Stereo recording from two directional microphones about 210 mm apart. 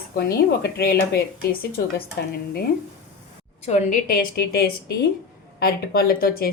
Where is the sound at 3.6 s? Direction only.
35° left (ahead or behind).